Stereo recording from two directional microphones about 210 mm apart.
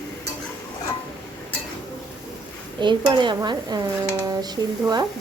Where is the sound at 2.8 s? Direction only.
20° right (ahead or behind).